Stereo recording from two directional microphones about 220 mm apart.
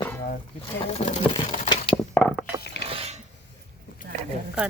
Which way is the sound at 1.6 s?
25° left (ahead or behind).